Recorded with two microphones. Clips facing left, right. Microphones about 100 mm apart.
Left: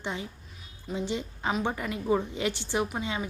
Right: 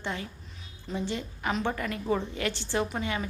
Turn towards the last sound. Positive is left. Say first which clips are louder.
# even
turn(degrees=15)  # may be behind; listen again after turning